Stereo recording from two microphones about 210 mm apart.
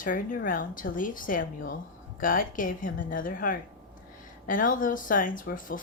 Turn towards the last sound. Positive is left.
turn(degrees=40)  # may be behind; listen again after turning